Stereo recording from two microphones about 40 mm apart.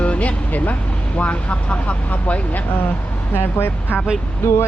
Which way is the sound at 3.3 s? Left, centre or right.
Left.